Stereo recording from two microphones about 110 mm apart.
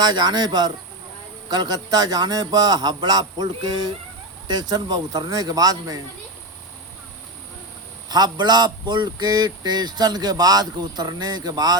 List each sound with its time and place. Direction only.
0.0 s speech: 40° right (ahead or behind)
8.1 s speech: 40° right (ahead or behind)